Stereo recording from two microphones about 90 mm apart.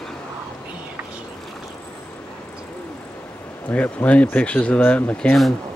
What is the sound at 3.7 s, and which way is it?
Speech, 15° left (ahead or behind).